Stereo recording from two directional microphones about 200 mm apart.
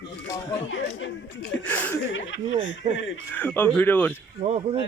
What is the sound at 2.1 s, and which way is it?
Speech, 65° left (ahead or behind).